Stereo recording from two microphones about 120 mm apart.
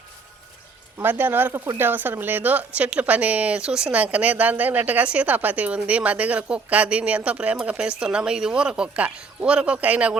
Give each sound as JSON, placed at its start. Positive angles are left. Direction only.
{"t": 0.9, "sound": "a woman's voice", "side_deg": -15}